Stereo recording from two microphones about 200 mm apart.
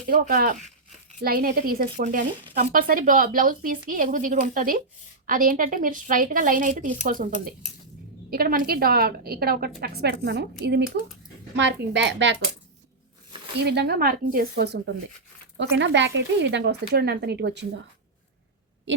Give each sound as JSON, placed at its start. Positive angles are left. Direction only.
{"t": 0.1, "sound": "speech", "side_deg": -45}
{"t": 13.7, "sound": "speech", "side_deg": -55}